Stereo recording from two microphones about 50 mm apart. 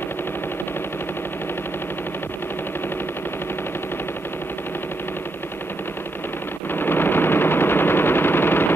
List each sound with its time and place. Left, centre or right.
6.7 s machine gun: left